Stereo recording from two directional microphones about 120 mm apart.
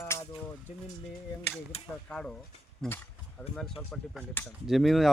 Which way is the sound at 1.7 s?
55° left (ahead or behind).